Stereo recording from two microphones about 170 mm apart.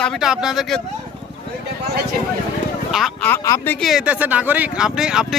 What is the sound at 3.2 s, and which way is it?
Speech, 15° left (ahead or behind).